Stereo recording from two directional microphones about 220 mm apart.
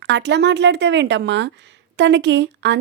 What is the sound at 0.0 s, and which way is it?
Speech, 50° right (ahead or behind).